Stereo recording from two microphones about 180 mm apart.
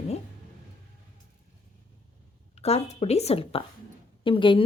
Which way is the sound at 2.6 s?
35° left (ahead or behind).